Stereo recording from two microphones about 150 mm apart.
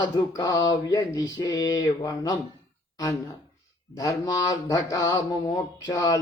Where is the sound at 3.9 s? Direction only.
20° left (ahead or behind).